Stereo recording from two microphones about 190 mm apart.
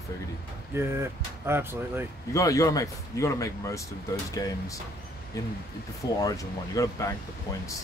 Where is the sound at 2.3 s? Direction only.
15° left (ahead or behind).